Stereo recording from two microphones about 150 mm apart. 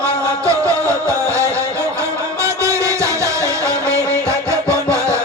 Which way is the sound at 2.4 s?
20° right (ahead or behind).